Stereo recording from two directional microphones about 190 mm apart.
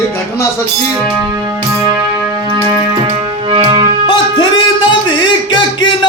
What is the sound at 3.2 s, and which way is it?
Music, 25° right (ahead or behind).